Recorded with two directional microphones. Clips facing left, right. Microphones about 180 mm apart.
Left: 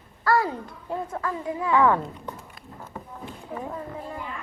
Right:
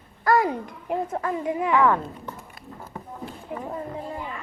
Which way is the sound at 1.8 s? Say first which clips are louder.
Even; 15° left (ahead or behind).